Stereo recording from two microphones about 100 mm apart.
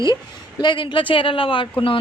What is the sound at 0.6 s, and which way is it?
Speech, 50° left (ahead or behind).